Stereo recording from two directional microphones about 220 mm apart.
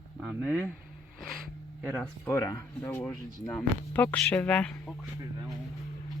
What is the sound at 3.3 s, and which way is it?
Speech, 15° left (ahead or behind).